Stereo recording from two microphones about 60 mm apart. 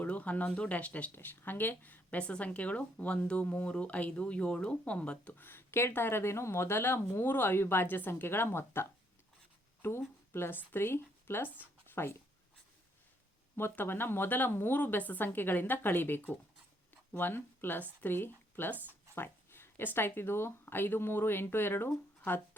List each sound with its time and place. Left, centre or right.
0.0 s speech: left
1.1 s speech: left
5.4 s a woman's voice: left
11.9 s a sound: left
13.6 s speech: left